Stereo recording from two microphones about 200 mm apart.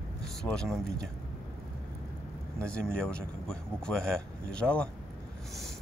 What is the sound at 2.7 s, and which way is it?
Speech, 5° left (ahead or behind).